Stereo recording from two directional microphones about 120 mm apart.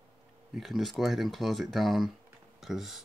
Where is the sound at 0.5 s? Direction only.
Centre (ahead or behind).